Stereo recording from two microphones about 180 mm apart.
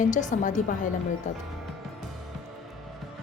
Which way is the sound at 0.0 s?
45° left (ahead or behind).